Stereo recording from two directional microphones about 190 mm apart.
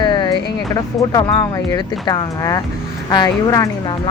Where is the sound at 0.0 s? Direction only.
25° left (ahead or behind).